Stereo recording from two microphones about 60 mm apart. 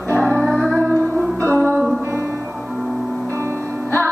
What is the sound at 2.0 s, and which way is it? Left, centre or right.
Music, right.